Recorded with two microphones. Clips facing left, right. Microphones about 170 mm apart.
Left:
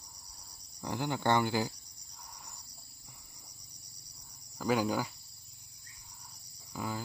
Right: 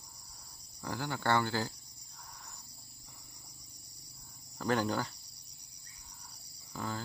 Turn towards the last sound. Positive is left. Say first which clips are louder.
# left 1 dB
turn(degrees=10)  # may be behind; listen again after turning